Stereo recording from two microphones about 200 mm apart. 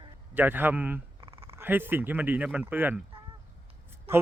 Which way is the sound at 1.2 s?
30° right (ahead or behind).